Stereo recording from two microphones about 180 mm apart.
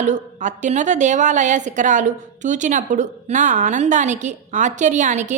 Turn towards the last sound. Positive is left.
turn(degrees=-45)  # may be behind; listen again after turning